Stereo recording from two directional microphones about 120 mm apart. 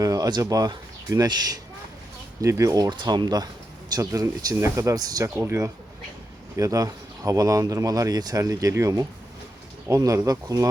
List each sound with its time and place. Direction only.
0.0 s speech: 30° right (ahead or behind)
2.9 s speech: 40° right (ahead or behind)